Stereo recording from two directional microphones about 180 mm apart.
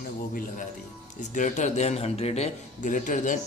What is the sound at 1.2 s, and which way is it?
A man's voice, 45° left (ahead or behind).